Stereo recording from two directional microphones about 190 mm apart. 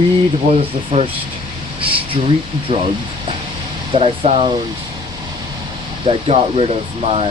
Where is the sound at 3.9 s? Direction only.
30° right (ahead or behind).